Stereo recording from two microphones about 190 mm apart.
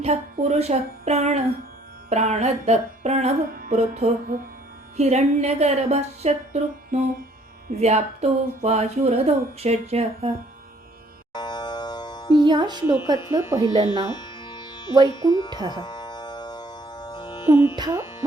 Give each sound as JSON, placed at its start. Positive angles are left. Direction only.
{"t": 0.0, "sound": "speech", "side_deg": -35}
{"t": 11.3, "sound": "music", "side_deg": 20}
{"t": 12.5, "sound": "speech", "side_deg": -20}
{"t": 13.3, "sound": "music", "side_deg": -20}
{"t": 13.8, "sound": "music", "side_deg": 20}
{"t": 15.3, "sound": "speech", "side_deg": 25}
{"t": 15.7, "sound": "music", "side_deg": 20}
{"t": 17.7, "sound": "music", "side_deg": -20}